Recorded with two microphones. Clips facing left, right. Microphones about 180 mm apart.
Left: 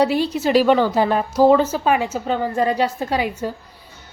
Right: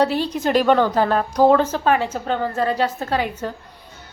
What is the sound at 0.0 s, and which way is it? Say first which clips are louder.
A woman's voice: left 1 dB; 10° left (ahead or behind).